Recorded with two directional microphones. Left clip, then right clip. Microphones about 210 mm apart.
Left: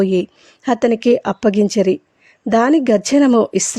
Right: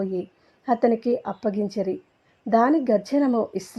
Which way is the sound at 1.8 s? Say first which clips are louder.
Left 12 dB; 50° left (ahead or behind).